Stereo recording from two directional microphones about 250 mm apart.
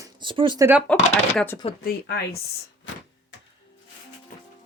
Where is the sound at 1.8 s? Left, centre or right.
Left.